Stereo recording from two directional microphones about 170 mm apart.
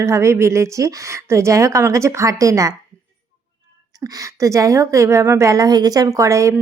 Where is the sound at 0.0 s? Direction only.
15° right (ahead or behind).